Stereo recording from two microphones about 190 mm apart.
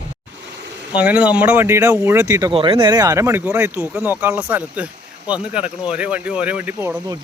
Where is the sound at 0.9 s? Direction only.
5° right (ahead or behind).